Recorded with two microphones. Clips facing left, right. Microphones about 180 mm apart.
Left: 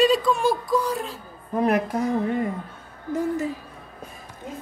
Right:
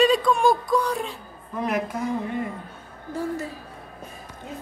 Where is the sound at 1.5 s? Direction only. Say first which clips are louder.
Left 5 dB; 40° left (ahead or behind).